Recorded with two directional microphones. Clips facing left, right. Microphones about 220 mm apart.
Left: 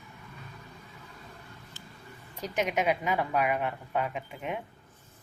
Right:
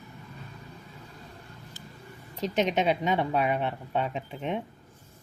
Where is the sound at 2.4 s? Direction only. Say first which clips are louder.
Right 3 dB; 25° right (ahead or behind).